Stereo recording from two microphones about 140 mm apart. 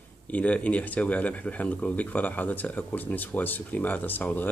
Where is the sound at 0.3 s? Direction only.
10° left (ahead or behind).